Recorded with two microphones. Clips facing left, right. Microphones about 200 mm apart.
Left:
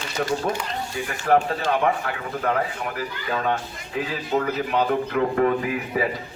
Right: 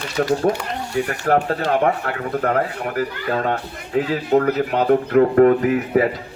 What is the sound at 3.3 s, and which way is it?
Speech, 45° right (ahead or behind).